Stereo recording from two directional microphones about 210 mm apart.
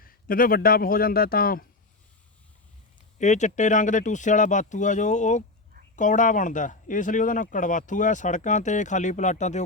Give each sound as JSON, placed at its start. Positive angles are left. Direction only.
{"t": 0.0, "sound": "speech", "side_deg": 45}
{"t": 3.2, "sound": "speech", "side_deg": 35}